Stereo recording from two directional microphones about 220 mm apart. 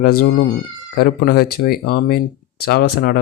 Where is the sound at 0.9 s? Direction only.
45° left (ahead or behind).